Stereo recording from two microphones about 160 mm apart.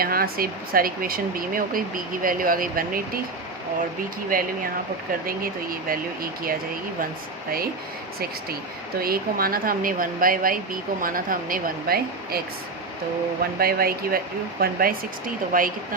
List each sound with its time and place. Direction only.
0.0 s speech: 65° right (ahead or behind)
5.2 s speech: 65° right (ahead or behind)
9.0 s speech: 70° right (ahead or behind)
13.4 s speech: 70° right (ahead or behind)